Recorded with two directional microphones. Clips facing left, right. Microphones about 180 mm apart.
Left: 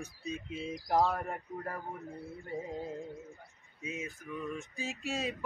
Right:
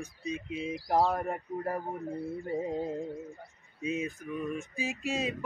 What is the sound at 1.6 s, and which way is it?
Speech, 35° right (ahead or behind).